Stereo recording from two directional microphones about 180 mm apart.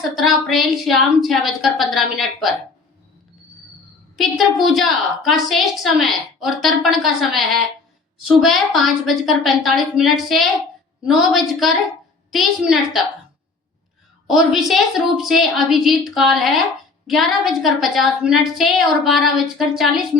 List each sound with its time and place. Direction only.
0.2 s a woman's voice: centre (ahead or behind)
4.2 s a woman's voice: centre (ahead or behind)
14.3 s a woman's voice: centre (ahead or behind)